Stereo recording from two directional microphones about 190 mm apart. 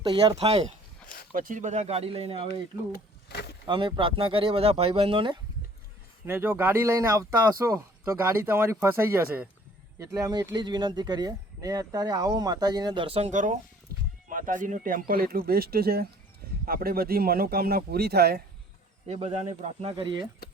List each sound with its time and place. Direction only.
0.0 s speech: 25° right (ahead or behind)
1.0 s a sound: 50° left (ahead or behind)
1.3 s speech: 45° right (ahead or behind); by 2.5 s 30° right (ahead or behind)
3.2 s speech: 60° left (ahead or behind)
3.7 s speech: 25° right (ahead or behind)
6.2 s speech: 10° right (ahead or behind); by 13.6 s 40° right (ahead or behind)
13.9 s a sound: 55° right (ahead or behind)
14.3 s speech: 45° right (ahead or behind)
19.0 s speech: 35° right (ahead or behind)